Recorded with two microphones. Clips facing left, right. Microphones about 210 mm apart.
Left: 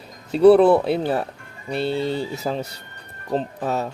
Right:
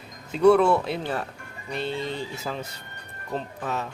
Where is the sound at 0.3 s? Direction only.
35° left (ahead or behind).